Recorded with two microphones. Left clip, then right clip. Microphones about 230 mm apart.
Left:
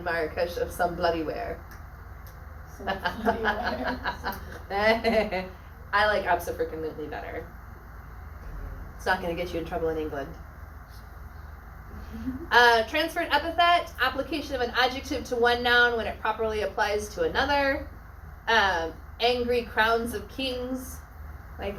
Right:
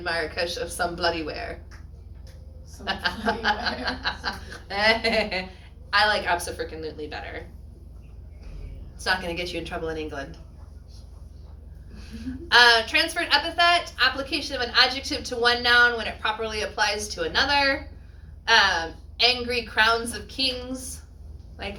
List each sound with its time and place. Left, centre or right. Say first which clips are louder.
0.0 s a woman's voice: right 1 dB; right
2.8 s a woman's voice: right 1 dB; right
9.0 s a woman's voice: right 1 dB; right
12.5 s a woman's voice: right 3 dB; right